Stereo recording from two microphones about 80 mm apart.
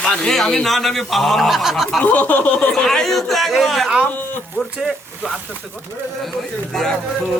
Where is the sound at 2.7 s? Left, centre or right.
Centre.